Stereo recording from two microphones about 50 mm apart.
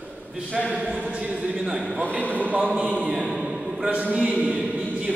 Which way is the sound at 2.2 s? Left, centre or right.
Left.